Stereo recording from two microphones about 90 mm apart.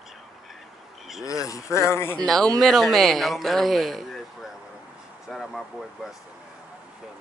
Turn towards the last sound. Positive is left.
turn(degrees=0)  # may be behind; listen again after turning